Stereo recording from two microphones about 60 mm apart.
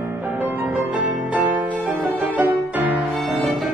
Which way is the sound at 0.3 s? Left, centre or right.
Right.